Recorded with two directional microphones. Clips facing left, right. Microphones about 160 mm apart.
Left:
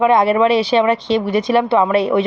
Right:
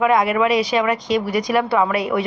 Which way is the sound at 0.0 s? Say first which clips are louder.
Left 4 dB; 30° left (ahead or behind).